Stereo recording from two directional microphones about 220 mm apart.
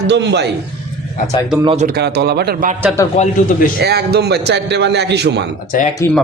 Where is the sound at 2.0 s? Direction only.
45° right (ahead or behind).